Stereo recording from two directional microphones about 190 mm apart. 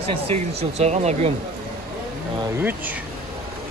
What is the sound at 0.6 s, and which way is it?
Speech, 35° right (ahead or behind).